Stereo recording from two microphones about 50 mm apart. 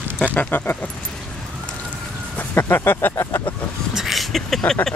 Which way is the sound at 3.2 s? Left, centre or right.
Left.